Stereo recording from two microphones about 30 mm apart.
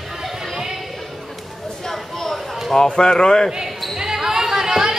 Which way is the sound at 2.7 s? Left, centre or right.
Left.